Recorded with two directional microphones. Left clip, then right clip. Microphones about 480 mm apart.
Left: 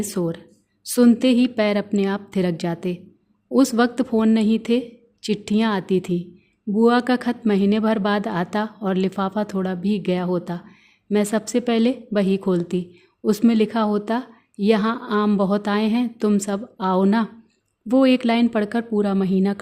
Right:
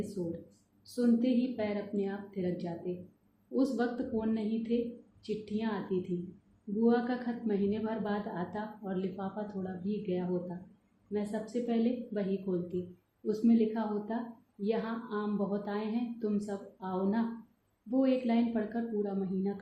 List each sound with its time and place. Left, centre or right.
0.2 s a woman's voice: left